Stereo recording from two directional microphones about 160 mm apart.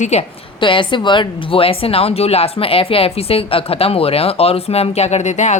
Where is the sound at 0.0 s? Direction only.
45° left (ahead or behind).